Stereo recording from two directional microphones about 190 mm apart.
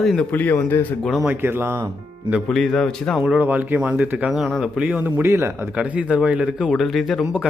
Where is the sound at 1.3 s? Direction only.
10° right (ahead or behind).